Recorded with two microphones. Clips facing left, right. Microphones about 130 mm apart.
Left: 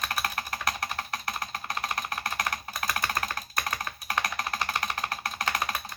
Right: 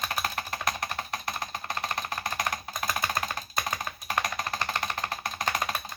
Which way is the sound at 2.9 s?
15° right (ahead or behind).